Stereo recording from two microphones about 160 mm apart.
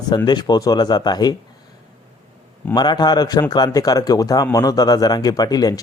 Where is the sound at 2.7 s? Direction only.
25° left (ahead or behind).